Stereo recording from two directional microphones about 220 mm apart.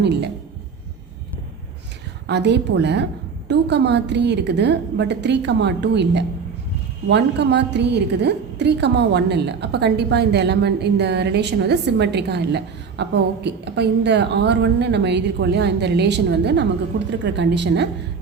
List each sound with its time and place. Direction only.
0.0 s a woman's voice: 50° right (ahead or behind)
2.2 s a woman's voice: 50° right (ahead or behind)